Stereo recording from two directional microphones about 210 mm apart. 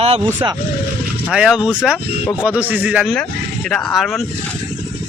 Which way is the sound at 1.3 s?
5° right (ahead or behind).